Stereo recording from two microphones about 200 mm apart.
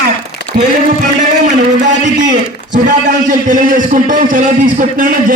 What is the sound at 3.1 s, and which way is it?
A man's voice, 40° right (ahead or behind).